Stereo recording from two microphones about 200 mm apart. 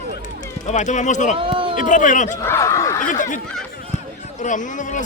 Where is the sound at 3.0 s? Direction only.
40° left (ahead or behind).